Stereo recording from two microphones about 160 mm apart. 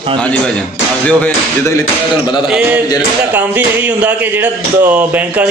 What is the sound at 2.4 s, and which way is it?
Mantra, 5° right (ahead or behind).